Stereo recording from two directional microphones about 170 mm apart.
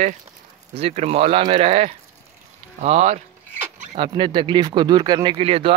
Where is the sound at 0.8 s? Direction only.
35° right (ahead or behind).